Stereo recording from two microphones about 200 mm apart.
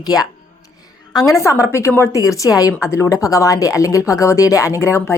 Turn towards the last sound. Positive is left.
turn(degrees=15)  # may be behind; listen again after turning